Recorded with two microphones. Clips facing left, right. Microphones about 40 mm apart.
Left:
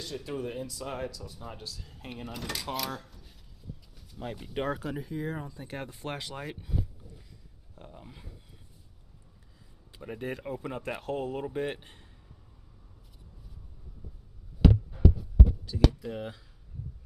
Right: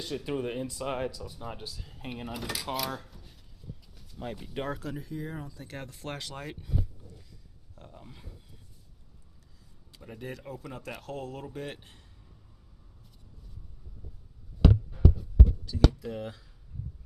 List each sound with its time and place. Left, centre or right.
0.3 s speech: centre
1.2 s speech: centre
4.7 s speech: centre
9.9 s speech: left
14.6 s a sound: centre